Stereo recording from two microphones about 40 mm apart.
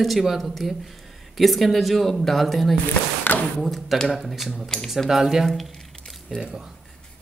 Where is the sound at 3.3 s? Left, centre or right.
Left.